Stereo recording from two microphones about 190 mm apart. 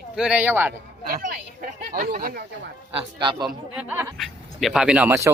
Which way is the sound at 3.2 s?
25° right (ahead or behind).